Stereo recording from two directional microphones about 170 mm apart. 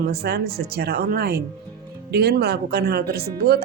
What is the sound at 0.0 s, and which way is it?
Speech, 70° right (ahead or behind).